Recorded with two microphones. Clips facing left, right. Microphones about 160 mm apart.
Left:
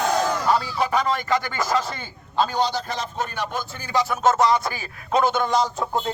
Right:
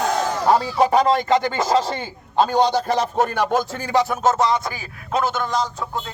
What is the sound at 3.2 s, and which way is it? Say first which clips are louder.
Speech: right 8 dB; 75° right (ahead or behind).